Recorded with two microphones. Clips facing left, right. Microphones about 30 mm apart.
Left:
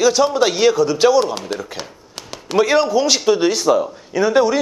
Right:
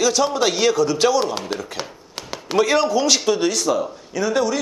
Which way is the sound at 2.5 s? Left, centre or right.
Centre.